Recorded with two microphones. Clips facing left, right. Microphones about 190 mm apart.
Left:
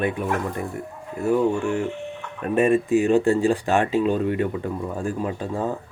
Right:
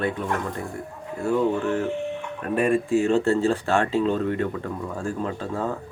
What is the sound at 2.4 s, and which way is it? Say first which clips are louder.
Speech: left 3 dB; 20° left (ahead or behind).